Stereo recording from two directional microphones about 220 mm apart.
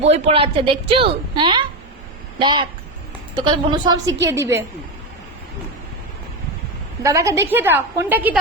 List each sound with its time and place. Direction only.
0.1 s a woman's voice: 25° right (ahead or behind)
7.0 s a woman's voice: 15° right (ahead or behind)